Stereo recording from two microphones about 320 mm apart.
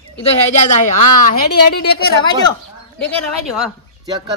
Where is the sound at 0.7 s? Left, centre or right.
Left.